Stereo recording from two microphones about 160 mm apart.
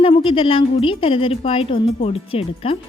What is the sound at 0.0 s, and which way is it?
Speech, 35° left (ahead or behind).